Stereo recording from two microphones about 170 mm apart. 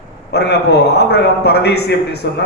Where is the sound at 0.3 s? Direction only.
75° left (ahead or behind).